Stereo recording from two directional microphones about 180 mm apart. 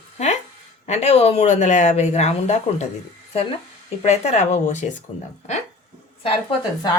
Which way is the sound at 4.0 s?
35° left (ahead or behind).